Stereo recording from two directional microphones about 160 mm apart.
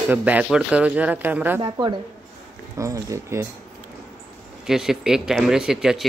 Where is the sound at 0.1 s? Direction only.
10° right (ahead or behind).